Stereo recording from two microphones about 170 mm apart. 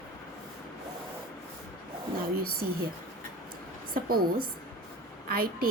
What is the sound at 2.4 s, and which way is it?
Speech, 60° right (ahead or behind).